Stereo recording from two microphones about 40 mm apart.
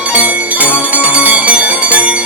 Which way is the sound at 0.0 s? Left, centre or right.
Right.